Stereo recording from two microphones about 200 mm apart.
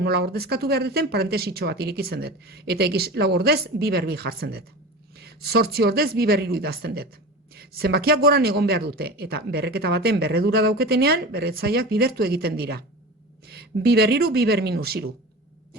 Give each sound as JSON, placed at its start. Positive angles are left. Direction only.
{"t": 0.0, "sound": "speech", "side_deg": -55}